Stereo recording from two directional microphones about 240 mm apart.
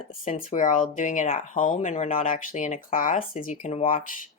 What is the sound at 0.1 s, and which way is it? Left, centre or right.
Speech, left.